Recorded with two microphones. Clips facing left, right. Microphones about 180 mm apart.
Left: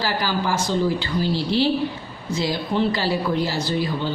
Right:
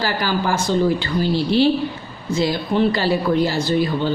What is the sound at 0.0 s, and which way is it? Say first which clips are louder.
A woman's voice: right 2 dB; 55° right (ahead or behind).